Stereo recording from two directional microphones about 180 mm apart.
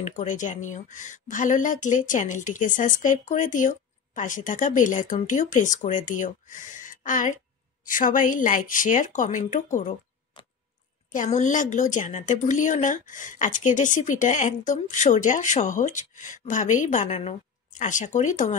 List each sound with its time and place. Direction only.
0.0 s a woman's voice: 40° left (ahead or behind)
11.1 s a woman's voice: 45° left (ahead or behind)